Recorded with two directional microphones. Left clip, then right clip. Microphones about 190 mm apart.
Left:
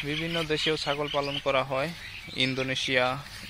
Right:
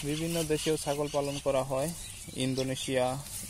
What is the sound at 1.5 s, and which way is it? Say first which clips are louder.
Speech: left 3 dB; 25° left (ahead or behind).